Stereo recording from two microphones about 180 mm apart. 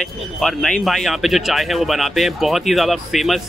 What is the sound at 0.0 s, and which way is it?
Speech, centre (ahead or behind).